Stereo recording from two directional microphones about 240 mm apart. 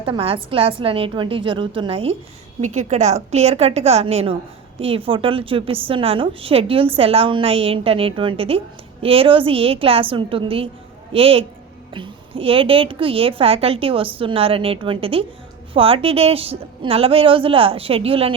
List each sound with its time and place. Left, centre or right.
0.0 s a woman's voice: right